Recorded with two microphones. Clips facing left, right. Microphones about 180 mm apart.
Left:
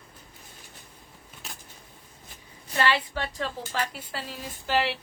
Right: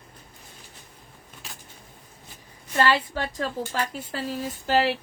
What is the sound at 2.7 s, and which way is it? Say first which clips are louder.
A woman's voice: right 3 dB; 45° right (ahead or behind).